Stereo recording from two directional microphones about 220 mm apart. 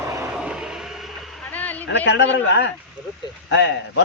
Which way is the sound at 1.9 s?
55° left (ahead or behind).